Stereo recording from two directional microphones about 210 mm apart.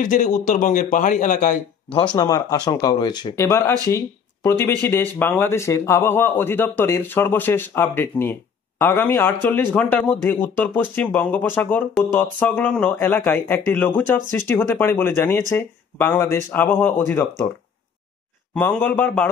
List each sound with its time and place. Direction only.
0.0 s speech: 35° left (ahead or behind)
2.1 s a man's voice: 20° left (ahead or behind)
18.5 s a man's voice: 5° left (ahead or behind)